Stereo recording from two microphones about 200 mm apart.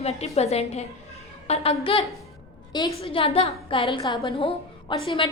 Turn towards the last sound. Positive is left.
turn(degrees=25)  # may be behind; listen again after turning